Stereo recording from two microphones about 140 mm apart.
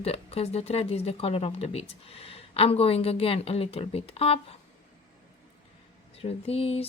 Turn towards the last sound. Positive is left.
turn(degrees=45)  # may be behind; listen again after turning